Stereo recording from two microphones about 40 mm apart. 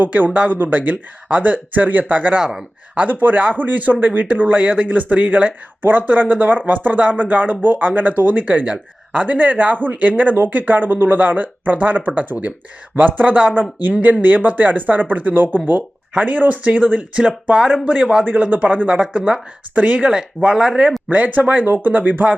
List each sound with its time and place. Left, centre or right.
0.0 s speech: right
2.4 s a man's voice: centre
3.1 s speech: right
13.6 s speech: right
15.5 s speech: right
16.1 s speech: right
17.2 s a man's voice: right
18.3 s speech: right
20.0 s speech: right
21.1 s speech: right